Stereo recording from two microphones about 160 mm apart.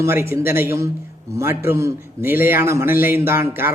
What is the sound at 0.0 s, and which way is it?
A man's voice, 15° right (ahead or behind).